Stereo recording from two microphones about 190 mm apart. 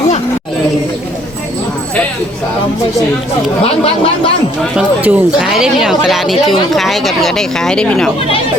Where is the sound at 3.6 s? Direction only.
30° left (ahead or behind).